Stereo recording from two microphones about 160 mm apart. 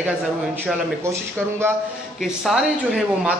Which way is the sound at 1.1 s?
15° right (ahead or behind).